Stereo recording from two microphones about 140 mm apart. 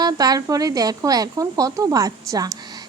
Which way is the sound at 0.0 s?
25° right (ahead or behind).